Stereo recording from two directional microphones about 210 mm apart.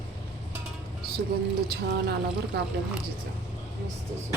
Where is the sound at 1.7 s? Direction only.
50° right (ahead or behind).